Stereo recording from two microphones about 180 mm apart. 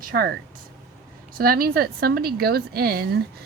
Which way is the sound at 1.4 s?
55° right (ahead or behind).